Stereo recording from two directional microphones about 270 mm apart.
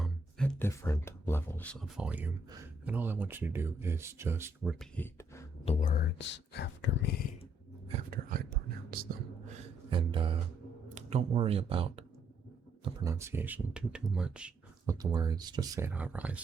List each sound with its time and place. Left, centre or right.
0.0 s speech: centre
5.6 s speech: left
7.9 s whispering: right
9.9 s a sound: centre
10.8 s speech: right; by 16.4 s centre